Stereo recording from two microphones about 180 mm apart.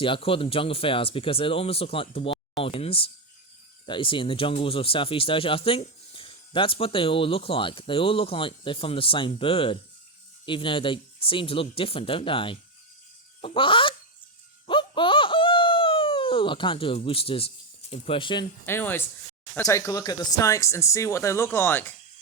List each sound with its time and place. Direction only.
0.0 s speech: 30° left (ahead or behind)
14.7 s laughter: 25° left (ahead or behind)
17.9 s speech: 30° left (ahead or behind)
18.6 s speech: 10° left (ahead or behind)